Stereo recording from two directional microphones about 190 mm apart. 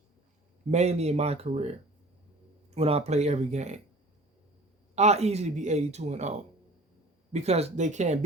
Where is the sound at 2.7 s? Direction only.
30° right (ahead or behind).